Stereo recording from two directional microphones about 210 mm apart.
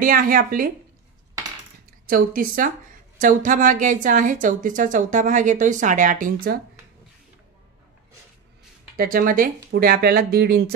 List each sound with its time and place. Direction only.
0.0 s speech: 40° right (ahead or behind)
2.0 s a woman's voice: 40° right (ahead or behind)
8.9 s speech: 45° right (ahead or behind)